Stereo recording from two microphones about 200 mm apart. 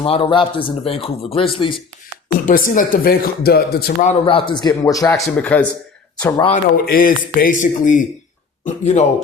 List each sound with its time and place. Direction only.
0.0 s speech: 30° left (ahead or behind)
2.5 s speech: 45° left (ahead or behind)
4.3 s speech: 25° left (ahead or behind)
5.2 s a man's voice: 5° left (ahead or behind)
6.2 s speech: 20° left (ahead or behind)
6.5 s speech: 45° left (ahead or behind)